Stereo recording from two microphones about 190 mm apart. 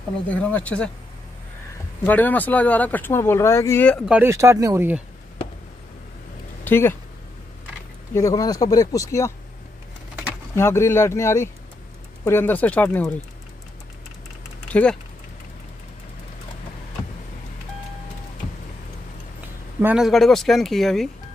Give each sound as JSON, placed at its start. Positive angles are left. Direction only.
{"t": 0.3, "sound": "speech", "side_deg": 10}
{"t": 2.0, "sound": "speech", "side_deg": 10}
{"t": 4.1, "sound": "speech", "side_deg": -15}
{"t": 6.6, "sound": "speech", "side_deg": 10}
{"t": 8.1, "sound": "speech", "side_deg": 15}
{"t": 10.5, "sound": "speech", "side_deg": 15}
{"t": 14.7, "sound": "speech", "side_deg": 5}
{"t": 19.8, "sound": "speech", "side_deg": -5}